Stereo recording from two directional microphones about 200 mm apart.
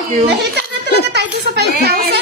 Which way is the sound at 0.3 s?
60° right (ahead or behind).